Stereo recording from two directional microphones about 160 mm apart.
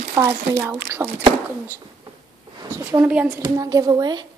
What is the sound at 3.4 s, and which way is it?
Speech, 25° right (ahead or behind).